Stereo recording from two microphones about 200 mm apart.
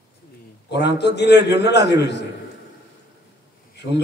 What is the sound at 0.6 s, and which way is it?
A man's voice, 55° left (ahead or behind).